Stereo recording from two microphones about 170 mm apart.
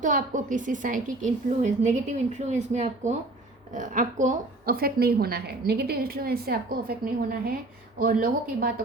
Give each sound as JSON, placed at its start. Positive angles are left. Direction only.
{"t": 0.0, "sound": "a woman's voice", "side_deg": -50}